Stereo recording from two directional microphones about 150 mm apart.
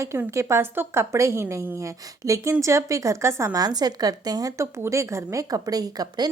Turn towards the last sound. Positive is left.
turn(degrees=-25)  # may be behind; listen again after turning